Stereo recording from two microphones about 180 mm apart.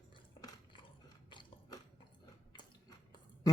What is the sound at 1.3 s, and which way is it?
Chewing, 25° left (ahead or behind).